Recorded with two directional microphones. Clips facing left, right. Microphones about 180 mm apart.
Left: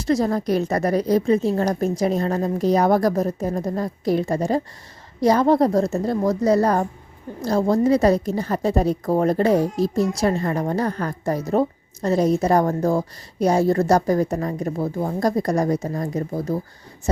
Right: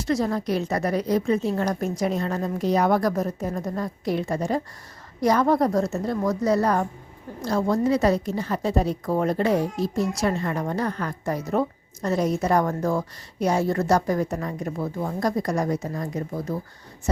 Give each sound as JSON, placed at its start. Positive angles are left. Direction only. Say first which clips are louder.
{"t": 0.0, "sound": "a woman's voice", "louder": "left 4 dB", "side_deg": 35}